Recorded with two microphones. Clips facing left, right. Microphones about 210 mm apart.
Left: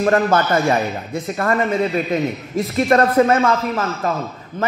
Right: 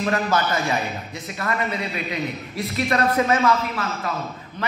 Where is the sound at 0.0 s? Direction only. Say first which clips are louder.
Left 6 dB; 50° left (ahead or behind).